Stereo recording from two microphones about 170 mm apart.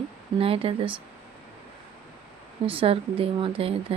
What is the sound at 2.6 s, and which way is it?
Speech, 35° right (ahead or behind).